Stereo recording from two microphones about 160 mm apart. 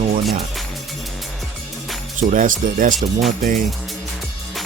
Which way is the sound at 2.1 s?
55° right (ahead or behind).